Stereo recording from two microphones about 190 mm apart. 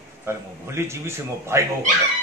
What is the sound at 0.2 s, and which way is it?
A man's voice, 15° right (ahead or behind).